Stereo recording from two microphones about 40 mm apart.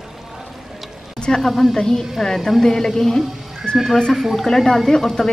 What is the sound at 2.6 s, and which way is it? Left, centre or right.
Speech, centre.